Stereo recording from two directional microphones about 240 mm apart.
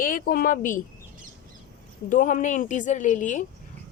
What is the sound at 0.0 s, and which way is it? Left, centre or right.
Speech, left.